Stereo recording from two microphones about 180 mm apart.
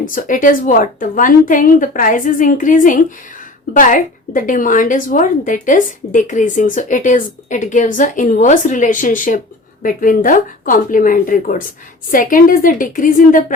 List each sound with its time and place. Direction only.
0.0 s a woman's voice: 50° left (ahead or behind)